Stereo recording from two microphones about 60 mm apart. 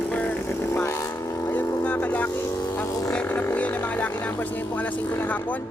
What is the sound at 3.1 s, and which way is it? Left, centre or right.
Speech, left.